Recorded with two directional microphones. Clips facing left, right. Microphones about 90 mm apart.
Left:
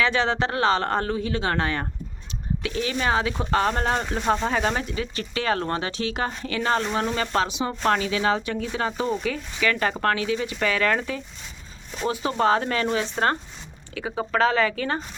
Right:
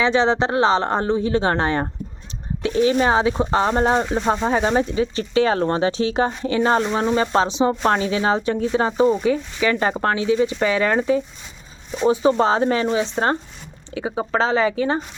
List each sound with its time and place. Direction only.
0.0 s speech: 20° right (ahead or behind)